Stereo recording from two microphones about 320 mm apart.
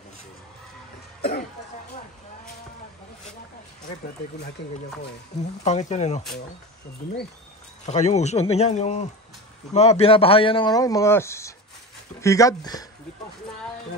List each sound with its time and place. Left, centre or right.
5.6 s speech: left
7.8 s speech: left